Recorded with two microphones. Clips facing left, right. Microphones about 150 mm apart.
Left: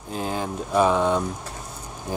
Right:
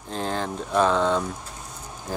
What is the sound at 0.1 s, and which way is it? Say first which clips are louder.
Speech: even; 10° left (ahead or behind).